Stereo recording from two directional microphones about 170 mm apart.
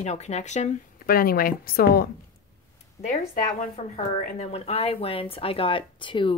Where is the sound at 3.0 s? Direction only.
50° left (ahead or behind).